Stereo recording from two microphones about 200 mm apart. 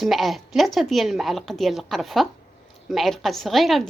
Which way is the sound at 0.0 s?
Centre (ahead or behind).